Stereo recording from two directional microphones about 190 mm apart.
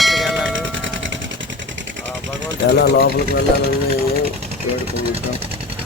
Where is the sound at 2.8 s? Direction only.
60° left (ahead or behind).